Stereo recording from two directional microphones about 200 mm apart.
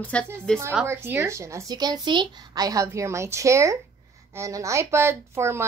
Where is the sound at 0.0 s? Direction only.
5° left (ahead or behind).